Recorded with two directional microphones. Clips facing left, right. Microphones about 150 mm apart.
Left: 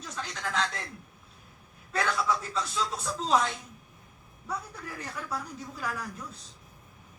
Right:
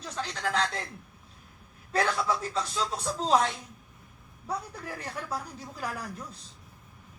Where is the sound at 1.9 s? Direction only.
35° right (ahead or behind).